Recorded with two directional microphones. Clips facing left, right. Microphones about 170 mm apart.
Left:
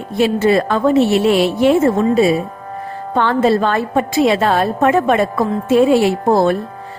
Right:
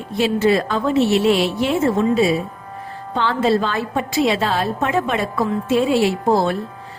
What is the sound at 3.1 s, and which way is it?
A woman's voice, 55° left (ahead or behind).